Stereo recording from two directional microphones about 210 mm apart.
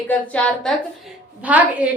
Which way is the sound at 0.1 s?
5° left (ahead or behind).